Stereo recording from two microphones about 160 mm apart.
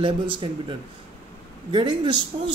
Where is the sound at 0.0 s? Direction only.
30° right (ahead or behind).